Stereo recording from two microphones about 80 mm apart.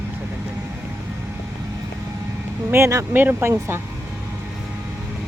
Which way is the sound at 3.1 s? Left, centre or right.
Right.